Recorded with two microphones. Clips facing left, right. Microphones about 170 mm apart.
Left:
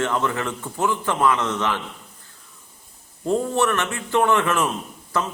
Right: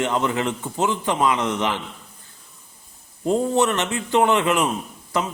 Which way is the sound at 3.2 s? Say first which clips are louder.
Right 2 dB; 20° right (ahead or behind).